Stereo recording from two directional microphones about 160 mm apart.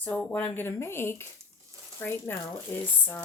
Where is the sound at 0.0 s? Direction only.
10° left (ahead or behind).